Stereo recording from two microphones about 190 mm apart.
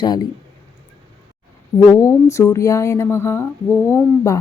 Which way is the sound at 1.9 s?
15° left (ahead or behind).